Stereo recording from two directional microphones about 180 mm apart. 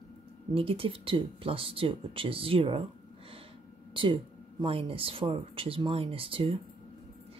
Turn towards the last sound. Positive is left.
turn(degrees=-30)  # may be behind; listen again after turning